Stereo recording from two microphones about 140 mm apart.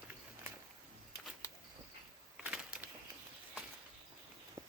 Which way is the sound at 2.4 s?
10° right (ahead or behind).